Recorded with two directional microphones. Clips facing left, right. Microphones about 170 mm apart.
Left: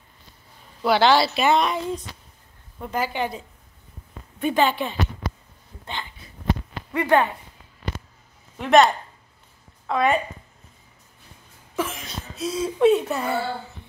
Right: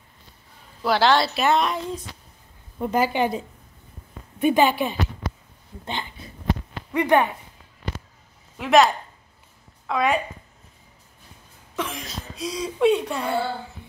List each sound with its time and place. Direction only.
0.8 s a woman's voice: centre (ahead or behind)
2.8 s a woman's voice: 15° right (ahead or behind)
6.9 s a woman's voice: 15° right (ahead or behind)
8.5 s a woman's voice: centre (ahead or behind)
11.7 s a woman's voice: 5° left (ahead or behind)